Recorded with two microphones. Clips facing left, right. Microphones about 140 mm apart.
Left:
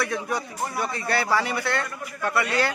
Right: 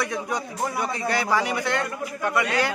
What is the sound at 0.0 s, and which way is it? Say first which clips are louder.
Speech: even; 20° right (ahead or behind).